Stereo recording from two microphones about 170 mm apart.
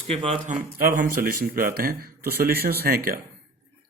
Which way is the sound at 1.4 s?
65° right (ahead or behind).